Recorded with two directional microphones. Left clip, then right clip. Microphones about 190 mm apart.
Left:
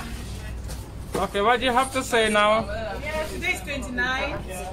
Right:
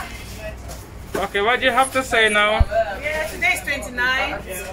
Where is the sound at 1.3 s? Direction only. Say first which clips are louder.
Right 3 dB; 10° left (ahead or behind).